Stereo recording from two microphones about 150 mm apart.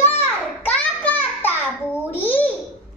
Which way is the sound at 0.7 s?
10° left (ahead or behind).